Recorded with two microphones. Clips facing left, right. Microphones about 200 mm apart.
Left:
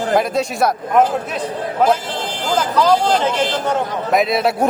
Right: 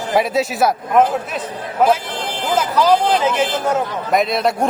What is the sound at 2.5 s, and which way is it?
A man's voice, 10° right (ahead or behind).